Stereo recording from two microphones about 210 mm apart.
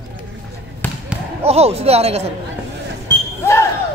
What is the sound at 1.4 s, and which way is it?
Speech, 30° right (ahead or behind).